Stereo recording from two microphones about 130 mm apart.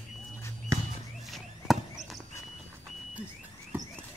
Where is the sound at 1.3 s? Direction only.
Centre (ahead or behind).